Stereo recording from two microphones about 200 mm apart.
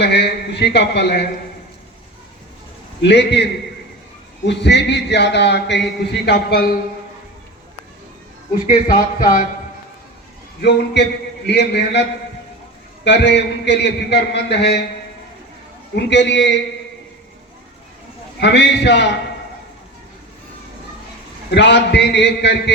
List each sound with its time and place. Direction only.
0.0 s a man's voice: 55° left (ahead or behind)
3.0 s a man's voice: 60° left (ahead or behind)
8.5 s speech: 45° left (ahead or behind)
10.6 s a man's voice: 55° left (ahead or behind)
13.1 s a man's voice: 60° left (ahead or behind)
16.0 s a man's voice: 60° left (ahead or behind)
18.3 s a man's voice: 60° left (ahead or behind)
21.5 s a man's voice: 60° left (ahead or behind)